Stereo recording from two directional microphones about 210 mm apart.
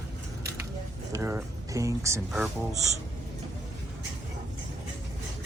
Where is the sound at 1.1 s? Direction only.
15° right (ahead or behind).